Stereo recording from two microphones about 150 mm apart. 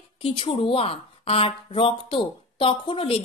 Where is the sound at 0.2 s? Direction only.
35° left (ahead or behind).